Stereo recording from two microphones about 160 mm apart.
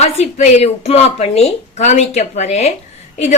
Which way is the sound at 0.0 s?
45° left (ahead or behind).